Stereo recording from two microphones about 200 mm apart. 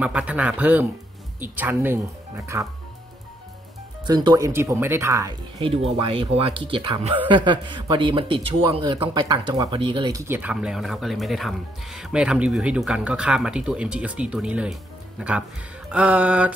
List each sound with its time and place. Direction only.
0.0 s speech: 5° right (ahead or behind)
4.0 s a man's voice: 20° right (ahead or behind)